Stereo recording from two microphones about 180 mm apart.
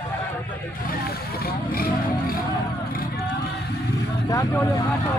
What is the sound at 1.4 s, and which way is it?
Vehicle, 55° left (ahead or behind).